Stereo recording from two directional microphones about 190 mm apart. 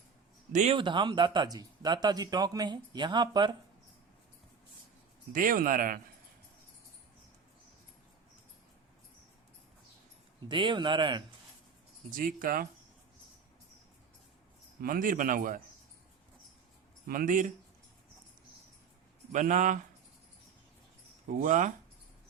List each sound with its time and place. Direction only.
0.5 s speech: 35° right (ahead or behind)
0.8 s speech: 25° right (ahead or behind)
5.3 s speech: 45° right (ahead or behind)
10.5 s speech: 25° right (ahead or behind)
12.1 s speech: 45° right (ahead or behind)
14.8 s speech: 45° right (ahead or behind)
17.1 s speech: 45° right (ahead or behind)
19.3 s speech: 40° right (ahead or behind)
21.2 s speech: 40° right (ahead or behind)